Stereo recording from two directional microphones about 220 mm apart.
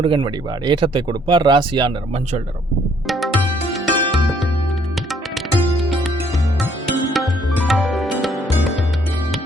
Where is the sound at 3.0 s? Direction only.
Centre (ahead or behind).